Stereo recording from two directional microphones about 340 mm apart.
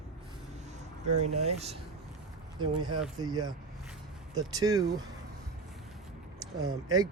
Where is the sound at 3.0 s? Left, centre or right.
Centre.